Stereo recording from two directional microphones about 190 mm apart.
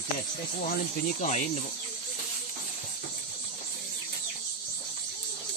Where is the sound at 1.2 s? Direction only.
35° left (ahead or behind).